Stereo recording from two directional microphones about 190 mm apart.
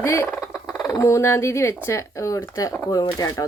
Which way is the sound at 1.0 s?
15° left (ahead or behind).